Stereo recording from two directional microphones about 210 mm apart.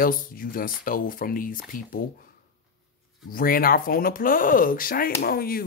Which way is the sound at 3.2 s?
45° left (ahead or behind).